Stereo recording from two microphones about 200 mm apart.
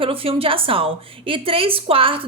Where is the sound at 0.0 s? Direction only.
30° right (ahead or behind).